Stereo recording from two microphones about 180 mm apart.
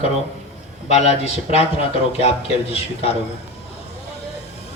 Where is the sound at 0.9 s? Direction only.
35° left (ahead or behind).